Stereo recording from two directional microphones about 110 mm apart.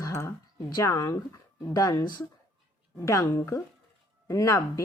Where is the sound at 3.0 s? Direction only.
25° left (ahead or behind).